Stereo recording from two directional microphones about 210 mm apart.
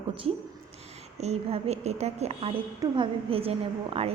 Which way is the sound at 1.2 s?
30° right (ahead or behind).